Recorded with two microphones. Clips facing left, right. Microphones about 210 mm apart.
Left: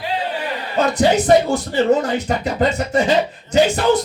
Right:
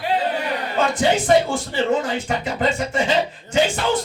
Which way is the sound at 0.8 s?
40° left (ahead or behind).